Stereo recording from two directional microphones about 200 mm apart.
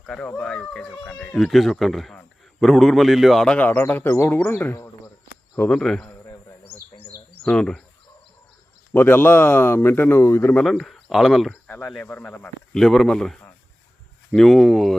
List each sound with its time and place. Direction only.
0.0 s speech: 5° left (ahead or behind)
6.7 s bird: 20° left (ahead or behind)
7.4 s speech: 5° left (ahead or behind)
8.9 s speech: 10° left (ahead or behind)